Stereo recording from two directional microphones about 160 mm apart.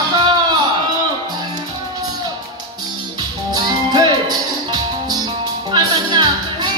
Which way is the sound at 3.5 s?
25° right (ahead or behind).